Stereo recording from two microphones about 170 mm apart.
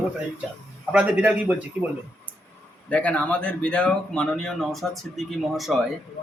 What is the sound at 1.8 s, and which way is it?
Speech, 5° left (ahead or behind).